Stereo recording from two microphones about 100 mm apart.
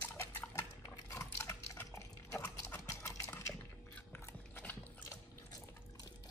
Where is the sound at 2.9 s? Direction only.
25° left (ahead or behind).